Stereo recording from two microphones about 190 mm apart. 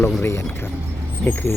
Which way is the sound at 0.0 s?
10° left (ahead or behind).